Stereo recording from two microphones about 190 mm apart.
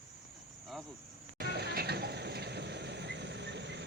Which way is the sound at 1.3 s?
60° right (ahead or behind).